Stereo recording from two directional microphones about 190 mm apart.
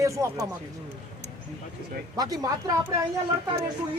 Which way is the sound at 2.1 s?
20° right (ahead or behind).